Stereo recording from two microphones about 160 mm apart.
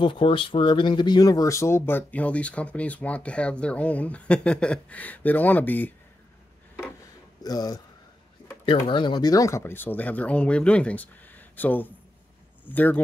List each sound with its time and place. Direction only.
0.0 s speech: 30° left (ahead or behind); by 5.9 s 10° left (ahead or behind)
7.4 s speech: 25° left (ahead or behind)